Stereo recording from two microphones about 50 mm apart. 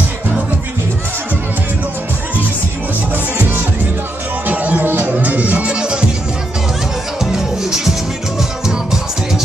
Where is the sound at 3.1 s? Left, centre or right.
Right.